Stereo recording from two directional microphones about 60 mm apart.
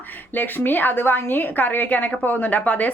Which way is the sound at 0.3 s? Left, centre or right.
Left.